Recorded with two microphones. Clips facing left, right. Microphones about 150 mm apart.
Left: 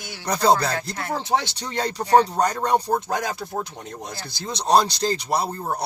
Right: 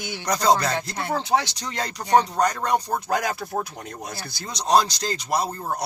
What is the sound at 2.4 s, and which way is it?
Speech, 30° left (ahead or behind).